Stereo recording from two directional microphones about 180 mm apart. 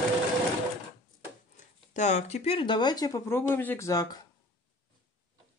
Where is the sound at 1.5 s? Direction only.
40° left (ahead or behind); by 4.0 s 15° left (ahead or behind).